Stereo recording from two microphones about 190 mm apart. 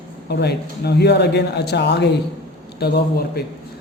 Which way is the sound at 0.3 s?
60° left (ahead or behind).